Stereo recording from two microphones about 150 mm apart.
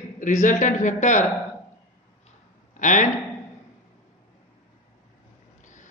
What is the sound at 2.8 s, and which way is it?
Speech, 55° left (ahead or behind).